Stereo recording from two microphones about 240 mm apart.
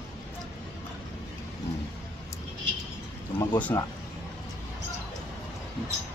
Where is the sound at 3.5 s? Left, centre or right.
Centre.